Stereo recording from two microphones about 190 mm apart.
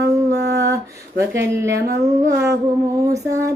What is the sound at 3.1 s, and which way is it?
Speech, 15° right (ahead or behind).